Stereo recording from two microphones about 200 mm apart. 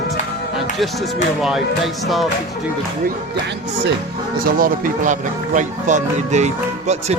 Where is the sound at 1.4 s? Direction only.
5° right (ahead or behind).